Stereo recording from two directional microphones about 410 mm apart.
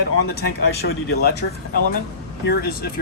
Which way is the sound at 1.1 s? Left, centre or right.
Left.